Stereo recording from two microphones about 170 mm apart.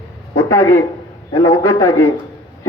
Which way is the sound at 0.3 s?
20° left (ahead or behind).